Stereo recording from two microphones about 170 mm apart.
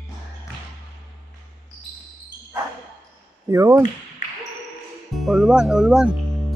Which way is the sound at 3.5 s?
15° right (ahead or behind).